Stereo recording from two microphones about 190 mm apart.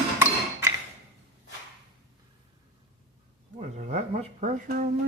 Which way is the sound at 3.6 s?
35° right (ahead or behind).